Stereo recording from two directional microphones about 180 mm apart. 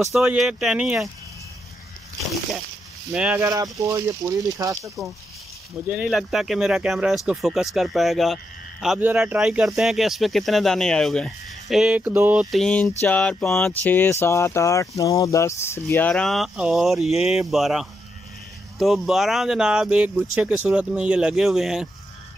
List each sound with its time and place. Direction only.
0.0 s speech: 5° right (ahead or behind)
3.1 s speech: 5° right (ahead or behind)
3.4 s speech: 20° right (ahead or behind)
5.9 s speech: 5° right (ahead or behind)